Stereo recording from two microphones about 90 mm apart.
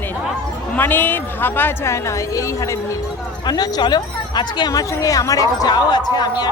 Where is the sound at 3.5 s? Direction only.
50° left (ahead or behind).